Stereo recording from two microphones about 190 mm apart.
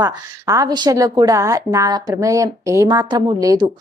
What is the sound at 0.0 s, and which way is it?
A woman's voice, 15° right (ahead or behind).